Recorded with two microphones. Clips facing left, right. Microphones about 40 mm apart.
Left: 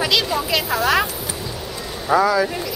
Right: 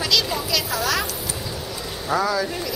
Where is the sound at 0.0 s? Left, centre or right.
Left.